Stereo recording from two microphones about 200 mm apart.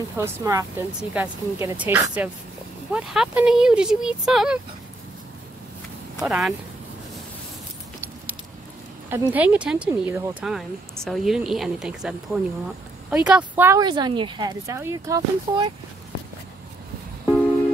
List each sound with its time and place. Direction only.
0.2 s a woman's voice: 15° right (ahead or behind)
6.1 s speech: centre (ahead or behind)
9.1 s a woman's voice: 10° right (ahead or behind)